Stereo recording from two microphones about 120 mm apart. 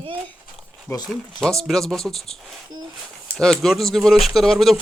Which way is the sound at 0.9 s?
25° left (ahead or behind).